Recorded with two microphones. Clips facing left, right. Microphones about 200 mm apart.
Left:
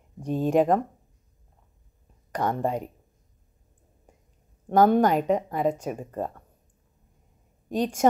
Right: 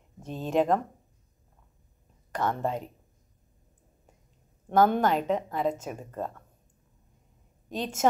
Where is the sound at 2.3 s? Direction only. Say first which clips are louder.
Left 3 dB; 15° left (ahead or behind).